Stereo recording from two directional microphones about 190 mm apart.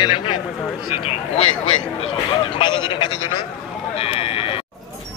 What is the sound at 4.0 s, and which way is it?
Sheep, 30° left (ahead or behind).